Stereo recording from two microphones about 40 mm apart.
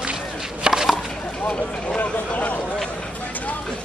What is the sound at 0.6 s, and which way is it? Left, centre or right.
Chopping, centre.